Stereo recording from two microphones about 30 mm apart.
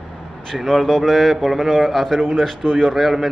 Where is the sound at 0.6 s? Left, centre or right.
Centre.